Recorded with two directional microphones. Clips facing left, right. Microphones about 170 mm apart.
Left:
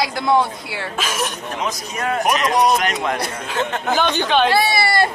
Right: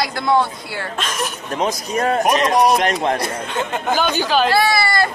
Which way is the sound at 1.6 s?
35° right (ahead or behind).